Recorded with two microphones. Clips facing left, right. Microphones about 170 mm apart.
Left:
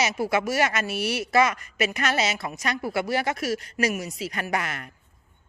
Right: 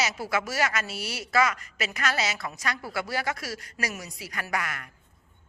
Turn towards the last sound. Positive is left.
turn(degrees=25)  # may be behind; listen again after turning